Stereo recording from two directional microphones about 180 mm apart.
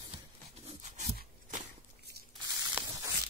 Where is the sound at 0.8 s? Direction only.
45° right (ahead or behind).